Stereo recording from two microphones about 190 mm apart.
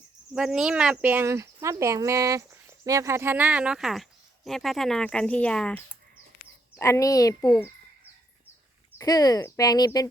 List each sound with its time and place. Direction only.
0.3 s speech: 5° right (ahead or behind); by 7.7 s 20° left (ahead or behind)
9.0 s speech: 20° left (ahead or behind)